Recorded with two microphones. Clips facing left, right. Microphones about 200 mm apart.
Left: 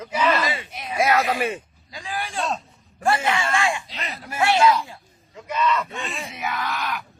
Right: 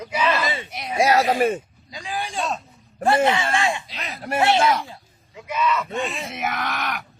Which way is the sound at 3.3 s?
20° right (ahead or behind).